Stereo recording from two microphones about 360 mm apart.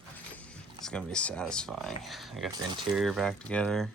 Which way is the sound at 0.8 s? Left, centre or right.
Centre.